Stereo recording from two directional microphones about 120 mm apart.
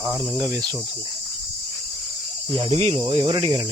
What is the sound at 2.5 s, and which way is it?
Cricket, 50° right (ahead or behind).